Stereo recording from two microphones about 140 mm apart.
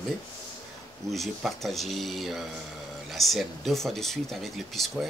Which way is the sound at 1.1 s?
Centre (ahead or behind).